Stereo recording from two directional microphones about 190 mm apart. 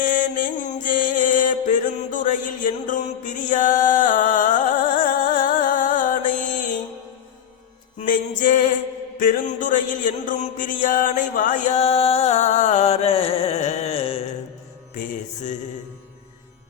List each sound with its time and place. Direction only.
0.0 s music: 45° left (ahead or behind)
7.9 s music: 45° left (ahead or behind)
9.1 s a sound: 45° left (ahead or behind); by 14.2 s 30° left (ahead or behind)
14.9 s music: 45° left (ahead or behind)